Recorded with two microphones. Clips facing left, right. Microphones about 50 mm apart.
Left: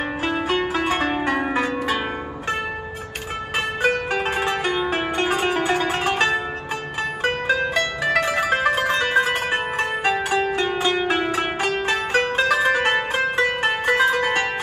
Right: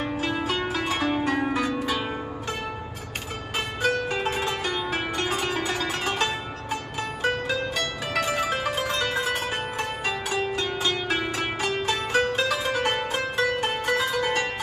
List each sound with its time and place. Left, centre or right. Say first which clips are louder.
0.0 s zither: left 3 dB; left
3.5 s music: left 4 dB; left
7.0 s zither: left 3 dB; left
8.2 s music: left 4 dB; left